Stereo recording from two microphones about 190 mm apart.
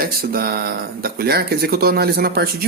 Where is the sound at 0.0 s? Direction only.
50° right (ahead or behind).